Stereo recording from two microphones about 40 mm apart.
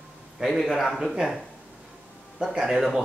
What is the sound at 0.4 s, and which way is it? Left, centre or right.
Speech, centre.